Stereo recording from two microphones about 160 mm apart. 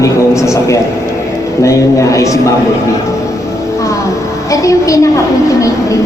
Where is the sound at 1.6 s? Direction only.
20° left (ahead or behind).